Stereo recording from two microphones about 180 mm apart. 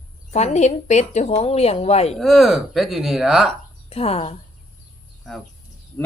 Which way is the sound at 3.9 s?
35° left (ahead or behind).